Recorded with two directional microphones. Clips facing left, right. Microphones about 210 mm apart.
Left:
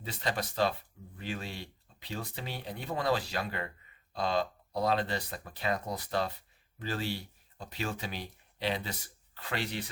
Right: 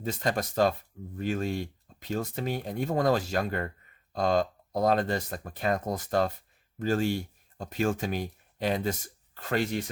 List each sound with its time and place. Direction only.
0.0 s speech: 45° right (ahead or behind)